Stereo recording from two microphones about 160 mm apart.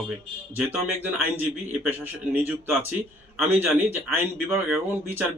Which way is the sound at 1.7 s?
10° right (ahead or behind).